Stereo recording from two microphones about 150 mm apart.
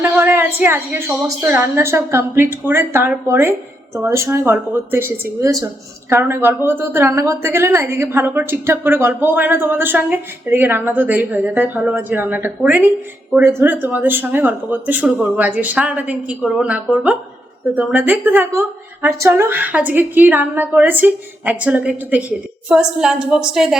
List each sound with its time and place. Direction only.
0.0 s a woman's voice: 15° right (ahead or behind)